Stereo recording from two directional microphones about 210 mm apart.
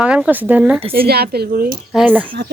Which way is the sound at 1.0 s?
50° right (ahead or behind).